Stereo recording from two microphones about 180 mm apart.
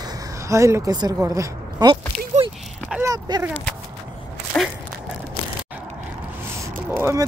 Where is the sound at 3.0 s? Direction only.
20° right (ahead or behind).